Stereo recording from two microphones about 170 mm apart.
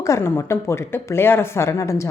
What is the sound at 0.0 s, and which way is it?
Speech, 15° left (ahead or behind).